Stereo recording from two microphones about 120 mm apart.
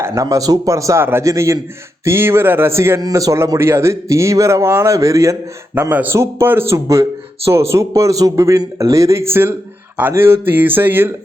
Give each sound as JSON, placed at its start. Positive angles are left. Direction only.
{"t": 0.0, "sound": "a man's voice", "side_deg": -25}